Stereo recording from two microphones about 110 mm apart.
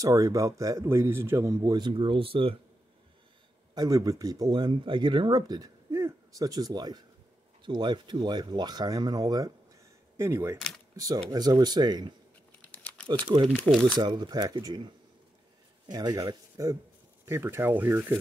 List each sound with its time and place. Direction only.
0.0 s speech: 30° right (ahead or behind); by 2.5 s 55° right (ahead or behind)
3.7 s speech: 35° right (ahead or behind)
10.1 s speech: 25° right (ahead or behind)
11.0 s speech: 35° right (ahead or behind)
13.2 s speech: 45° right (ahead or behind)
13.5 s speech: centre (ahead or behind)
13.9 s speech: 45° right (ahead or behind)
15.9 s speech: 35° right (ahead or behind)
17.3 s speech: 25° right (ahead or behind)